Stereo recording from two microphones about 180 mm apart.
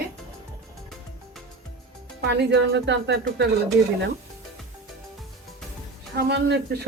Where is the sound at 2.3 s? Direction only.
70° right (ahead or behind).